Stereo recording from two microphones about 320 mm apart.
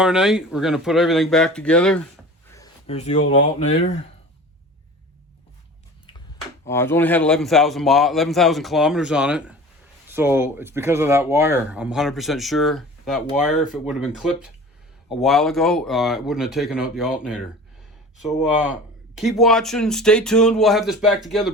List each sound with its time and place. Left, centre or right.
0.0 s speech: centre
2.5 s a sound: centre
3.6 s speech: left
6.7 s speech: centre